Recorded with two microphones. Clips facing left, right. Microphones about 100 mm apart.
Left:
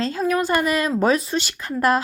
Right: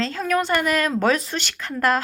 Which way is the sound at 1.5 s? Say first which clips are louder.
Left 2 dB; 15° left (ahead or behind).